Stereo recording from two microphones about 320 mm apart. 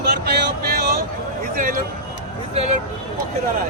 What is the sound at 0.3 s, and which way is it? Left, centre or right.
Vehicle, right.